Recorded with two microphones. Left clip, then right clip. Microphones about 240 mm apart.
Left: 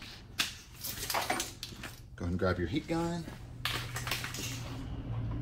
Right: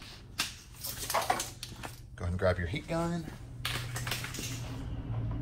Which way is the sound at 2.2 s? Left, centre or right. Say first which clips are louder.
Right 2 dB; right.